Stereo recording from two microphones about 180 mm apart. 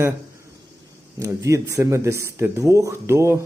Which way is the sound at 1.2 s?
15° right (ahead or behind).